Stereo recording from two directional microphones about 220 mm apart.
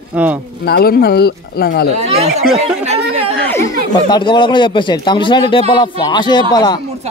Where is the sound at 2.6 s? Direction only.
25° right (ahead or behind).